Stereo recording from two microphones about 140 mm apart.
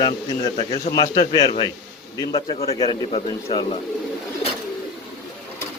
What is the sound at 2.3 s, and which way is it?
Speech, 40° left (ahead or behind).